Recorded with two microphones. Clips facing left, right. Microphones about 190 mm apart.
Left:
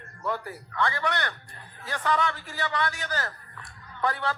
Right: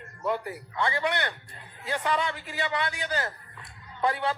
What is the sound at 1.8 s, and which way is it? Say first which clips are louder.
A man's voice: left 1 dB; 15° right (ahead or behind).